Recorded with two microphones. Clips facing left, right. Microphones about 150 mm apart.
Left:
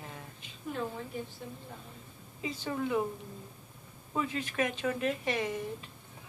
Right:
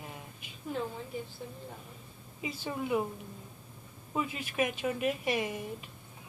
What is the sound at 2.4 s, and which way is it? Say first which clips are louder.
Speech: left 2 dB; 15° right (ahead or behind).